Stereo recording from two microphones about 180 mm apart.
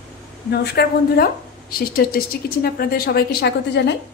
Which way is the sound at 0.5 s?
65° left (ahead or behind).